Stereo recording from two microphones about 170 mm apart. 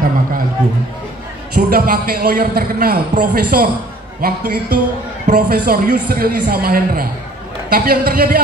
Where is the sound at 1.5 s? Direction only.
60° right (ahead or behind).